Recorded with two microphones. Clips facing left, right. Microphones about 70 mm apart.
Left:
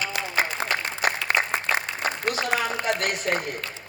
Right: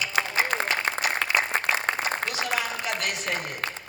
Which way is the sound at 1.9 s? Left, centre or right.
Right.